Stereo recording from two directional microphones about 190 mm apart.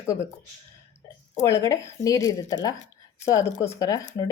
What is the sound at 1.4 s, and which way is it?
Speech, 15° left (ahead or behind).